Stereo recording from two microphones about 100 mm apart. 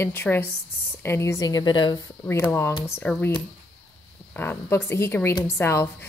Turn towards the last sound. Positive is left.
turn(degrees=25)  # may be behind; listen again after turning